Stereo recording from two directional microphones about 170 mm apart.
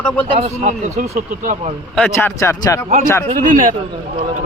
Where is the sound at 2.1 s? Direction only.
15° left (ahead or behind).